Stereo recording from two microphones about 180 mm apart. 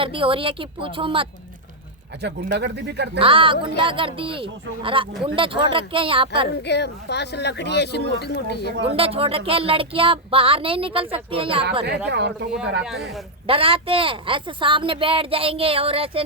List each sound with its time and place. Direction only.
0.0 s speech: 30° right (ahead or behind)
2.2 s speech: 75° right (ahead or behind)
3.2 s speech: 30° right (ahead or behind)
6.6 s speech: 70° left (ahead or behind)
8.8 s speech: 30° right (ahead or behind)
12.0 s speech: 70° right (ahead or behind)
13.5 s speech: 30° right (ahead or behind)